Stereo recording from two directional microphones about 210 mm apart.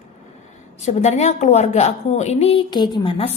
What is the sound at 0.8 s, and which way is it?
A woman's voice, 30° left (ahead or behind).